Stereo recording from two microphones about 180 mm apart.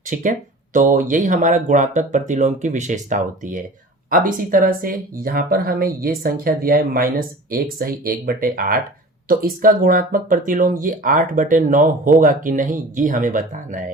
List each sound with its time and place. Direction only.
0.1 s speech: 45° right (ahead or behind)